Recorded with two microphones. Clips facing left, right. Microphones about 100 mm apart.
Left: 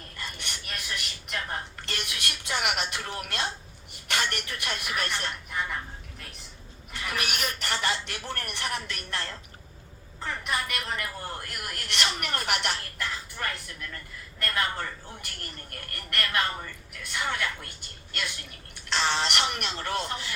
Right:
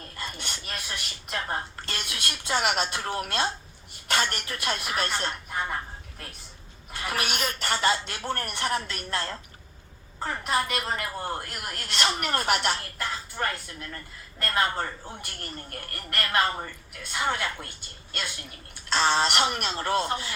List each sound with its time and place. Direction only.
0.3 s a sound: 30° right (ahead or behind)
4.1 s a man's voice: 30° right (ahead or behind)
7.0 s a man's voice: 30° right (ahead or behind)
18.9 s a man's voice: 30° right (ahead or behind)